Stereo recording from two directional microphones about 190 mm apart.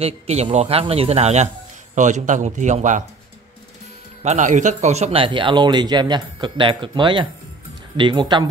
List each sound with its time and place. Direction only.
0.0 s a man's voice: 35° right (ahead or behind)
4.2 s speech: 35° right (ahead or behind)